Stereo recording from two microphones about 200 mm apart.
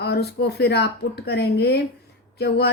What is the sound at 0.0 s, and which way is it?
Speech, 55° left (ahead or behind).